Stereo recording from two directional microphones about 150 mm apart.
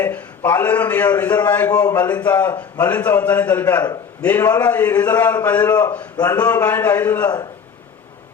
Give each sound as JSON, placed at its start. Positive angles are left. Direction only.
{"t": 0.0, "sound": "a man's voice", "side_deg": 10}
{"t": 1.7, "sound": "speech", "side_deg": 25}
{"t": 2.2, "sound": "a man's voice", "side_deg": 10}
{"t": 6.1, "sound": "speech", "side_deg": 25}
{"t": 6.5, "sound": "a man's voice", "side_deg": 10}